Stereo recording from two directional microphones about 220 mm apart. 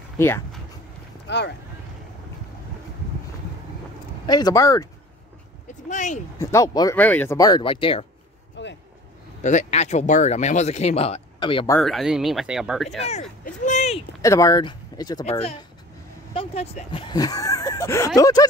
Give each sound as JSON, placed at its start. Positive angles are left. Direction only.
{"t": 0.2, "sound": "speech", "side_deg": 10}
{"t": 1.2, "sound": "speech", "side_deg": 50}
{"t": 4.3, "sound": "speech", "side_deg": 20}
{"t": 5.9, "sound": "speech", "side_deg": 35}
{"t": 6.4, "sound": "speech", "side_deg": 15}
{"t": 8.6, "sound": "vehicle", "side_deg": 55}
{"t": 9.4, "sound": "speech", "side_deg": 30}
{"t": 11.8, "sound": "speech", "side_deg": 0}
{"t": 13.0, "sound": "speech", "side_deg": 30}
{"t": 14.2, "sound": "speech", "side_deg": 15}